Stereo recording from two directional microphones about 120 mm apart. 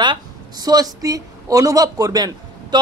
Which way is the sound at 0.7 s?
30° right (ahead or behind).